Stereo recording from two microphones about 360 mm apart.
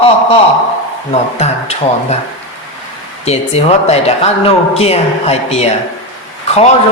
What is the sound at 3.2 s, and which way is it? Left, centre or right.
Speech, centre.